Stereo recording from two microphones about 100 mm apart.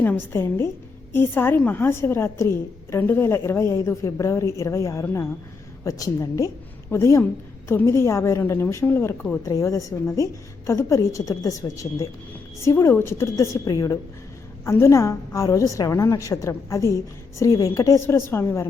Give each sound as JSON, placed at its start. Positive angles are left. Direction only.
{"t": 0.0, "sound": "a woman's voice", "side_deg": 20}
{"t": 9.4, "sound": "a woman's voice", "side_deg": 30}
{"t": 12.6, "sound": "a woman's voice", "side_deg": 25}